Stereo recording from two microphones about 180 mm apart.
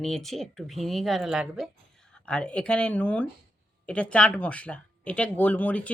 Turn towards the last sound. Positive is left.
turn(degrees=10)  # may be behind; listen again after turning